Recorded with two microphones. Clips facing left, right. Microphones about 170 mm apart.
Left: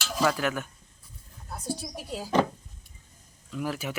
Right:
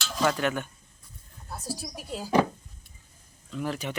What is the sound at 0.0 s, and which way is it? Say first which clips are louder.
Speech: even; 5° left (ahead or behind).